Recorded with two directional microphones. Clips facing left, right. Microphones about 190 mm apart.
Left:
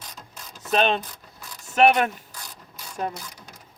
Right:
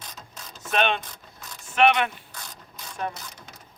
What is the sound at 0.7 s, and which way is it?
Mechanisms, 35° left (ahead or behind).